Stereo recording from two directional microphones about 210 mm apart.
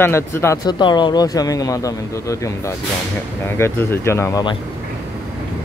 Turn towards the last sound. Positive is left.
turn(degrees=15)  # may be behind; listen again after turning